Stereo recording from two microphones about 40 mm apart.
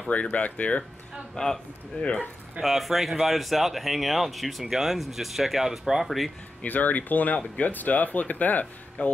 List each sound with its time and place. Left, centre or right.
0.1 s speech: left
1.3 s a man's voice: centre
2.6 s speech: centre
6.0 s speech: centre
6.6 s speech: left